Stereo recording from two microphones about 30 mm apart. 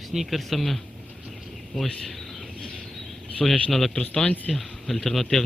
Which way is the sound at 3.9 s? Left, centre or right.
Left.